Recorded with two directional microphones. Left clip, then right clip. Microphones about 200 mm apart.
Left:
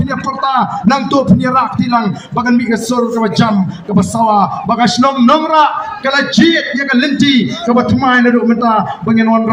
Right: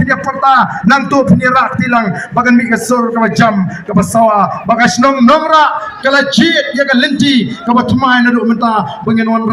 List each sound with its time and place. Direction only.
0.1 s speech: 20° right (ahead or behind)
6.1 s a man's voice: 50° right (ahead or behind)